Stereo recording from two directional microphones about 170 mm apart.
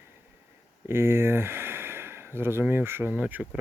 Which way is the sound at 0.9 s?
15° right (ahead or behind).